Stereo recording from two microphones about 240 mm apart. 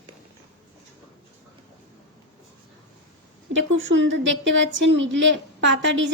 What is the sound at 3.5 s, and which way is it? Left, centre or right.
A woman's voice, right.